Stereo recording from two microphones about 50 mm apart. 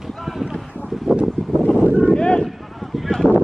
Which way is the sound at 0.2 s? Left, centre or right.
Centre.